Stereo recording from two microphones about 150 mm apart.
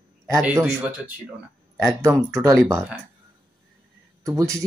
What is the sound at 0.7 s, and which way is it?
Speech, 10° right (ahead or behind).